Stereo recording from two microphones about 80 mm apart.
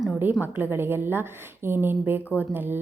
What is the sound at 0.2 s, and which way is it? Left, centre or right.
A woman's voice, right.